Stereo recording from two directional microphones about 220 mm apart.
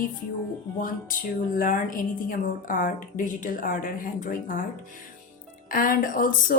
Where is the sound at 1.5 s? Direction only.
40° left (ahead or behind).